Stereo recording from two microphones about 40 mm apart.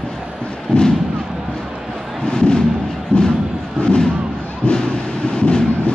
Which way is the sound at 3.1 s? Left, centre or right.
Left.